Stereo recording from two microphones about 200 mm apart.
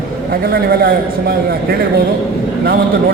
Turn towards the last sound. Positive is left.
turn(degrees=-50)  # may be behind; listen again after turning